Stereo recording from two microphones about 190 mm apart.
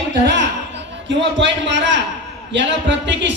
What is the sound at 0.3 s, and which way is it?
A man's voice, 65° right (ahead or behind).